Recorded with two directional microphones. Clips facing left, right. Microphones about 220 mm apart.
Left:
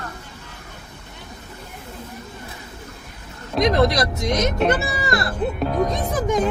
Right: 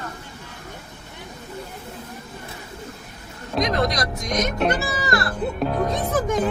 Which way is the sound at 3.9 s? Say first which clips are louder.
Left 5 dB; 25° left (ahead or behind).